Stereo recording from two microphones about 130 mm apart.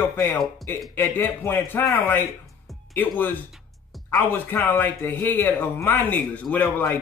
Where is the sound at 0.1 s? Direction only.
15° left (ahead or behind).